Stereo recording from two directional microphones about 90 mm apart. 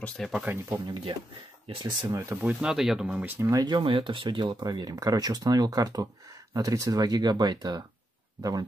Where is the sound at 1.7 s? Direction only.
75° right (ahead or behind).